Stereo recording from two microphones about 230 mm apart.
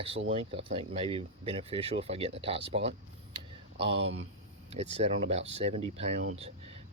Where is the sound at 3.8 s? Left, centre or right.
Right.